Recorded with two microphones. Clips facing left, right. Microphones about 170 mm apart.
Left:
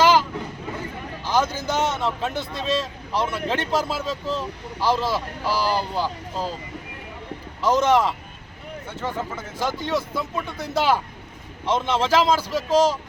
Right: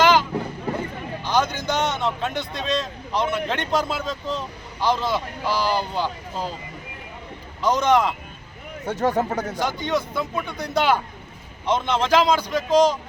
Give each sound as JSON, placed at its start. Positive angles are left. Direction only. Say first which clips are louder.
{"t": 0.0, "sound": "a sound", "louder": "even", "side_deg": 5}
{"t": 1.2, "sound": "a man's voice", "louder": "even", "side_deg": 5}
{"t": 7.6, "sound": "a man's voice", "louder": "even", "side_deg": 5}
{"t": 8.9, "sound": "speech", "louder": "right 8 dB", "side_deg": -40}
{"t": 9.6, "sound": "a man's voice", "louder": "left 2 dB", "side_deg": 5}